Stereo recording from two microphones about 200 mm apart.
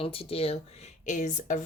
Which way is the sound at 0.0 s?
30° left (ahead or behind).